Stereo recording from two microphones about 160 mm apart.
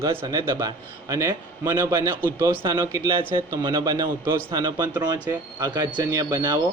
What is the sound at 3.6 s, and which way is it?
A man's voice, 25° right (ahead or behind).